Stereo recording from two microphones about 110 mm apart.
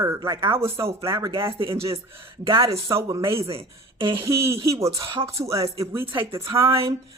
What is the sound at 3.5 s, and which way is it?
Speech, 55° right (ahead or behind).